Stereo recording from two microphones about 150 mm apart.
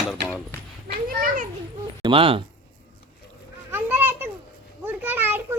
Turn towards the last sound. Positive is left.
turn(degrees=-15)  # may be behind; listen again after turning